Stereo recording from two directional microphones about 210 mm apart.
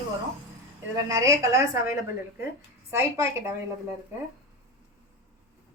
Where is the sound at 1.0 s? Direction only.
15° right (ahead or behind).